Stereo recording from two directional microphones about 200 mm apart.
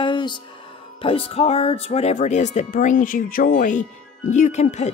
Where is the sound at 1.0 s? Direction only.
30° left (ahead or behind).